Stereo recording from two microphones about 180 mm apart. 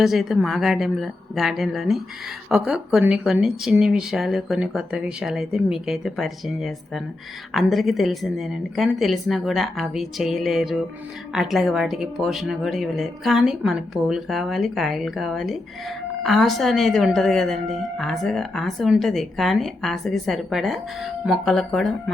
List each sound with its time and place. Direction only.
0.0 s a woman's voice: centre (ahead or behind)